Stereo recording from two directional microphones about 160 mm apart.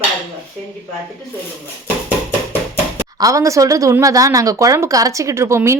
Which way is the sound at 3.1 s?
20° right (ahead or behind).